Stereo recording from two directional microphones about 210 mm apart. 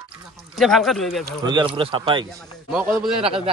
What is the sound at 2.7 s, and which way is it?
Speech, centre (ahead or behind).